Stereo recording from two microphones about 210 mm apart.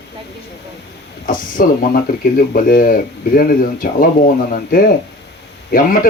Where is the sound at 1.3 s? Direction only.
40° left (ahead or behind).